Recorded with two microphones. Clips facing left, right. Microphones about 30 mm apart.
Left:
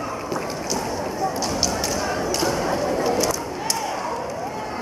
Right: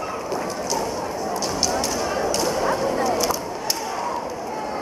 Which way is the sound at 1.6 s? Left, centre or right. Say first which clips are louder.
Right 1 dB; centre.